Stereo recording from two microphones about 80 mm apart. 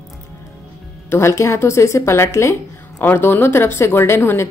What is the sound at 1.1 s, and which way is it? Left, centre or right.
A woman's voice, left.